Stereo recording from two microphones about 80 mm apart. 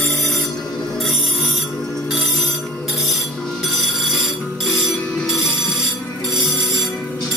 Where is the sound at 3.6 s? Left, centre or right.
Centre.